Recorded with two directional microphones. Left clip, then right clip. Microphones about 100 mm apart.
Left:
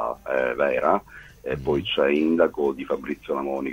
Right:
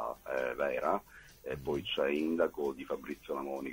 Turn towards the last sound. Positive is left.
turn(degrees=30)  # may be behind; listen again after turning